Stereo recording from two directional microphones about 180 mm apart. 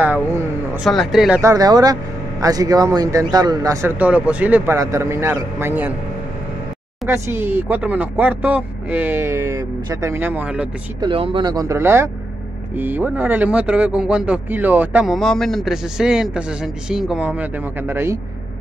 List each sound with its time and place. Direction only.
0.0 s speech: 10° right (ahead or behind)
0.8 s speech: centre (ahead or behind)
1.4 s speech: 20° right (ahead or behind)
7.1 s speech: 15° right (ahead or behind)
11.0 s speech: 30° right (ahead or behind)